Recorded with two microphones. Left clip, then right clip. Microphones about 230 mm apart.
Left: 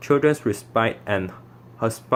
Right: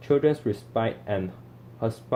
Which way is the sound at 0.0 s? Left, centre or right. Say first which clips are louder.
Left 3 dB; left.